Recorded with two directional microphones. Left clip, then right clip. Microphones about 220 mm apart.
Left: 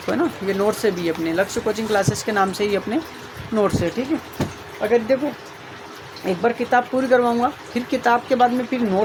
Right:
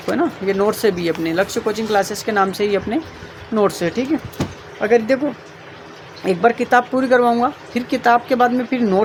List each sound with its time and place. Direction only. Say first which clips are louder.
0.1 s speech: right 3 dB; 15° right (ahead or behind)
6.2 s speech: right 5 dB; 30° right (ahead or behind)